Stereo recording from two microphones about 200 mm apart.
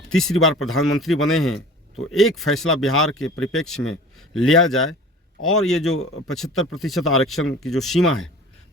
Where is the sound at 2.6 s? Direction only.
90° left.